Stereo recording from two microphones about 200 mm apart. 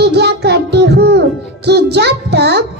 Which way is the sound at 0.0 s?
55° right (ahead or behind).